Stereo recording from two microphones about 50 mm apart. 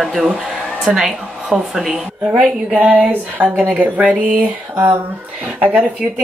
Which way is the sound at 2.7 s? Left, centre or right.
Right.